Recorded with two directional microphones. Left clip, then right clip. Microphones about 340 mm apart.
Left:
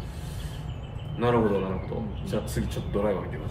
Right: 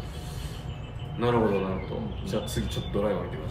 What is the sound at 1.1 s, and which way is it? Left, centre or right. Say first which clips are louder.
A man's voice: left 1 dB; centre.